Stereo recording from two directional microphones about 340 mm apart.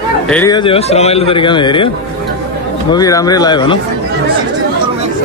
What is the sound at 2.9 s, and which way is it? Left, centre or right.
Speech, centre.